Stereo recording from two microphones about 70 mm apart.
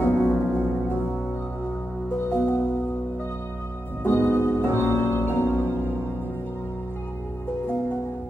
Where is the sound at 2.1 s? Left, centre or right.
Left.